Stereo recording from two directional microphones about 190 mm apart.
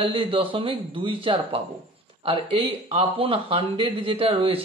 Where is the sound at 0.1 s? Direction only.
30° right (ahead or behind).